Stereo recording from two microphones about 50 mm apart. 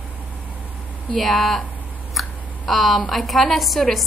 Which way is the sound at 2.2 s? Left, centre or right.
Centre.